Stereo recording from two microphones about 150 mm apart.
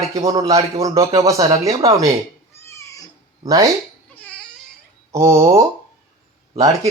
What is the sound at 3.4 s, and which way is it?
Speech, 25° right (ahead or behind).